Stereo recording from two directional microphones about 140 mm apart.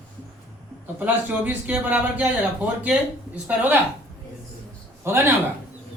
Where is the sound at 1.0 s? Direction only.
15° right (ahead or behind).